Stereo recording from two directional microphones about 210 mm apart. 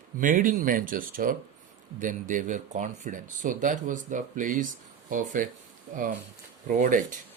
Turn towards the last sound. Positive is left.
turn(degrees=-40)  # may be behind; listen again after turning